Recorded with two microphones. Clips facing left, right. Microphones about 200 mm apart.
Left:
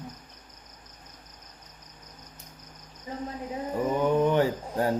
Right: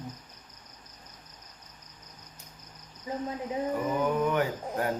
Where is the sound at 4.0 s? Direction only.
30° left (ahead or behind).